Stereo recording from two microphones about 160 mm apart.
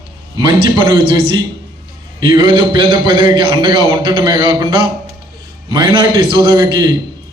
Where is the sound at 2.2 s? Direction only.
30° right (ahead or behind).